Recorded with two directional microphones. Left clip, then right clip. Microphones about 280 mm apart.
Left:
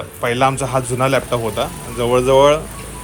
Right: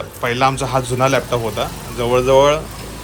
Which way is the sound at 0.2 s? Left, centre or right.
Centre.